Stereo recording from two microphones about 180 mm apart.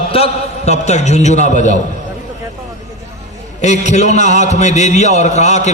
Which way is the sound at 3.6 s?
40° left (ahead or behind).